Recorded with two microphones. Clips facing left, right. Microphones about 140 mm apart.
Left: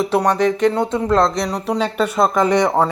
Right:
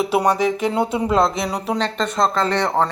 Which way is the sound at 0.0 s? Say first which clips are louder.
Left 2 dB; 5° right (ahead or behind).